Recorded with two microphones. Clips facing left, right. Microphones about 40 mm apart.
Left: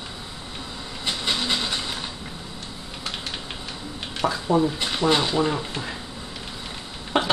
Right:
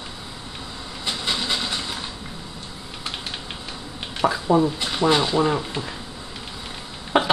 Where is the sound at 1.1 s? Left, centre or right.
Centre.